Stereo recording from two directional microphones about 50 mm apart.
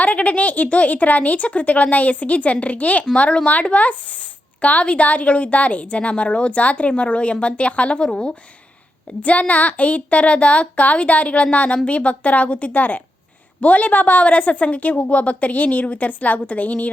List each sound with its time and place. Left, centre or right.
0.0 s a woman's voice: left